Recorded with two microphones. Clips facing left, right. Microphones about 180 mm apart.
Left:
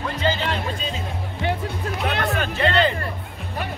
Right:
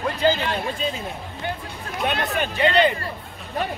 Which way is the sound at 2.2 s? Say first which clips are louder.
Even; 35° left (ahead or behind).